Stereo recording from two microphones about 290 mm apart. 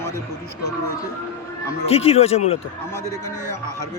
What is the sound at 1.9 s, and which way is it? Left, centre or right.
Speech, left.